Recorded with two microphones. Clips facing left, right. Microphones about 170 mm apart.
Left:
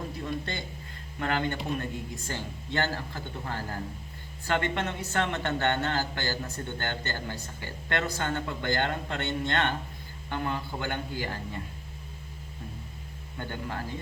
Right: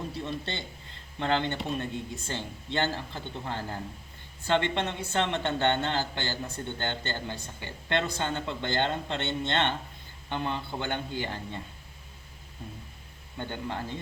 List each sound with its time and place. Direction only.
0.3 s speech: 25° right (ahead or behind)
13.4 s speech: 20° right (ahead or behind)